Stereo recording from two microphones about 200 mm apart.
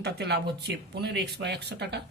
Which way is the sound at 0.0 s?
55° right (ahead or behind).